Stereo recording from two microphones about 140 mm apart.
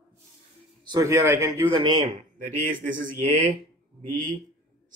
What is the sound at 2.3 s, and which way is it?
Speech, 75° right (ahead or behind).